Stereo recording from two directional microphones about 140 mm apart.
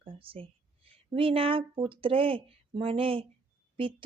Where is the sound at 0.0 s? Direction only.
40° right (ahead or behind).